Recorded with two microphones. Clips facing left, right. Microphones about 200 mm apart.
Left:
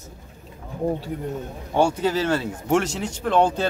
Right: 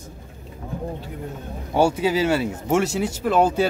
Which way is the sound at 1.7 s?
10° right (ahead or behind).